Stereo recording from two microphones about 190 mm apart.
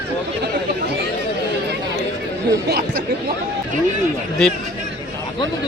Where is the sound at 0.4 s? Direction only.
60° right (ahead or behind).